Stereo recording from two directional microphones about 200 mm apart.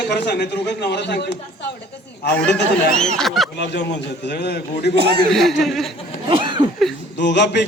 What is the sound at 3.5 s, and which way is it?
A man's voice, 60° left (ahead or behind).